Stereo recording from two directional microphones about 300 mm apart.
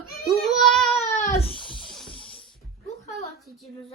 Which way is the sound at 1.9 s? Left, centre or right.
Centre.